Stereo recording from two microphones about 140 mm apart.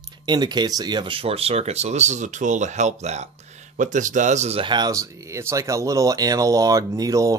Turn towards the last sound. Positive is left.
turn(degrees=-25)  # may be behind; listen again after turning